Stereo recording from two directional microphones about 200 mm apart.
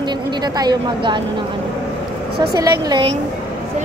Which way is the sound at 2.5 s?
20° right (ahead or behind).